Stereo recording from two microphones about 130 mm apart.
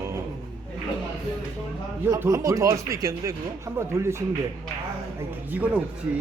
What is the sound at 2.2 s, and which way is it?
Speech, 25° right (ahead or behind).